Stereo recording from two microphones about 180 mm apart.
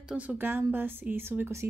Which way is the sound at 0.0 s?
5° right (ahead or behind).